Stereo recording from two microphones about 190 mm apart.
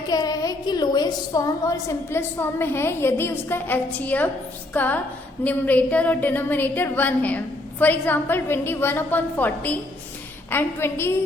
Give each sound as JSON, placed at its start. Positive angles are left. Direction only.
{"t": 0.1, "sound": "a woman's voice", "side_deg": 20}